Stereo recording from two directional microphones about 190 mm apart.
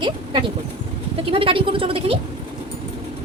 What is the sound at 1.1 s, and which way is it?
Speech, 30° right (ahead or behind).